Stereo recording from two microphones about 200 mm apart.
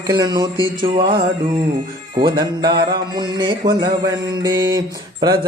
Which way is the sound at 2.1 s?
20° right (ahead or behind).